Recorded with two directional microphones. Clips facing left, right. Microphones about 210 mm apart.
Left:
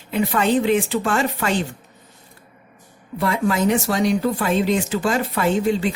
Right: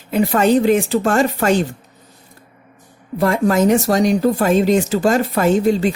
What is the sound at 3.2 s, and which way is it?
Speech, 45° right (ahead or behind).